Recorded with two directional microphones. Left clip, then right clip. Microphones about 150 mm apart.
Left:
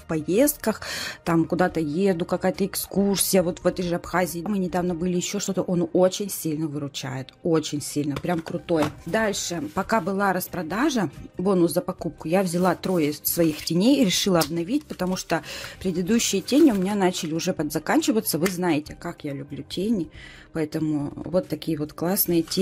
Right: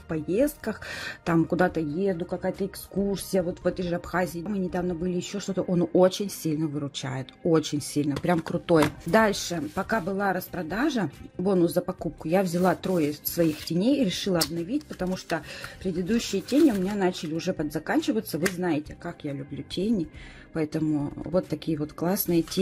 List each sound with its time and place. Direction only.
0.1 s speech: 25° left (ahead or behind)
1.9 s speech: 40° left (ahead or behind)
3.6 s speech: 20° left (ahead or behind)
5.7 s speech: centre (ahead or behind)
9.3 s speech: 5° left (ahead or behind)
9.8 s speech: 20° left (ahead or behind)